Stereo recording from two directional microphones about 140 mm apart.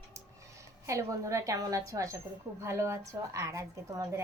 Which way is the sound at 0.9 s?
20° right (ahead or behind).